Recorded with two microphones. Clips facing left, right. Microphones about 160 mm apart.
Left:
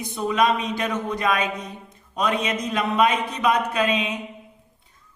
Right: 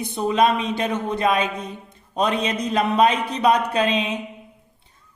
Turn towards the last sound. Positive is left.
turn(degrees=-30)  # may be behind; listen again after turning